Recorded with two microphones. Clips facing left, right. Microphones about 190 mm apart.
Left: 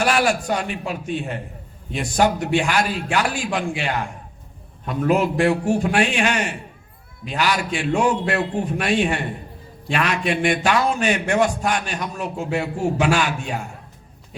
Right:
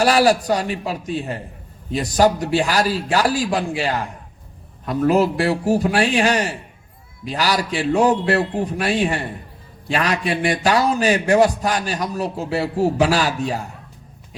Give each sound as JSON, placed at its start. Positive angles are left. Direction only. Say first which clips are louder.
{"t": 0.0, "sound": "speech", "louder": "right 4 dB", "side_deg": -35}